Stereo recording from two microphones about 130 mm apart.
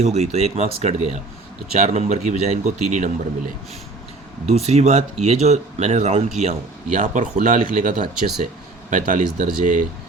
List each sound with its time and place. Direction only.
0.0 s a man's voice: 55° right (ahead or behind); by 3.5 s 75° right (ahead or behind)
4.4 s a man's voice: 55° right (ahead or behind); by 9.8 s 75° right (ahead or behind)